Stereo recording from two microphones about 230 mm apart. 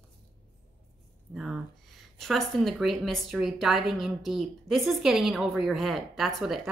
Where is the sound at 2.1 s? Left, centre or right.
Centre.